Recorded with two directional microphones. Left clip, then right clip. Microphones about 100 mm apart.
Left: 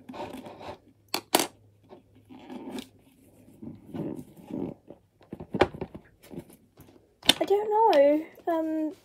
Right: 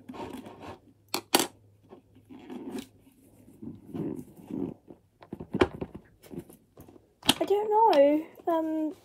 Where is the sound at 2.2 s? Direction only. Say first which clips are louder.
Even; 15° left (ahead or behind).